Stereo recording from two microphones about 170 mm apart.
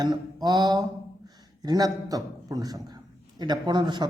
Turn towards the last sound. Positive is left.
turn(degrees=-25)  # may be behind; listen again after turning